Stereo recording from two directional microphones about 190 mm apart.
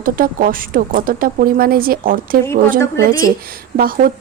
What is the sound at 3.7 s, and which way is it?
Speech, 50° right (ahead or behind).